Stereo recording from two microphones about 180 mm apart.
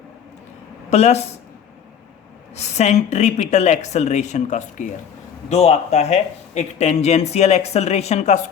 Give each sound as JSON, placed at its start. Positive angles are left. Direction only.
{"t": 0.9, "sound": "speech", "side_deg": 35}
{"t": 2.6, "sound": "speech", "side_deg": 40}